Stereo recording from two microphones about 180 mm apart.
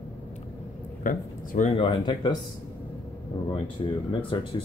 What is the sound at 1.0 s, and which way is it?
Speech, 50° left (ahead or behind).